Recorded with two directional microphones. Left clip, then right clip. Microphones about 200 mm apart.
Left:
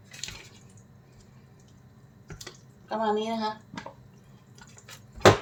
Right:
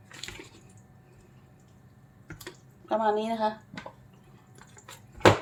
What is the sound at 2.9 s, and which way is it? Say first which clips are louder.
Speech: right 2 dB; 55° right (ahead or behind).